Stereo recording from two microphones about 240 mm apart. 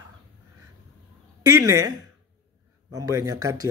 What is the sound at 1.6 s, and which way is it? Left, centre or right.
Speech, centre.